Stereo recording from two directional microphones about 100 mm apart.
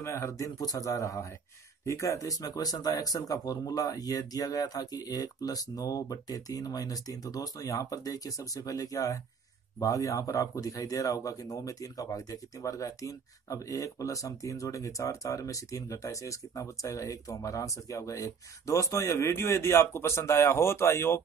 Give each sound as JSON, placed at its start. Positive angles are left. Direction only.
{"t": 0.0, "sound": "speech", "side_deg": 30}